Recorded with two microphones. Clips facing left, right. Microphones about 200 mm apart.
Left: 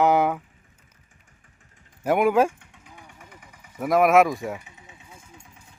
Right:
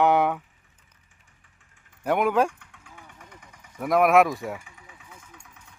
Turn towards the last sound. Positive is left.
turn(degrees=30)  # may be behind; listen again after turning